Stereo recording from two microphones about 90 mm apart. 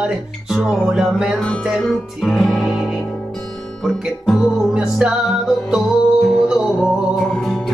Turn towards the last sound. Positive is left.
turn(degrees=5)  # may be behind; listen again after turning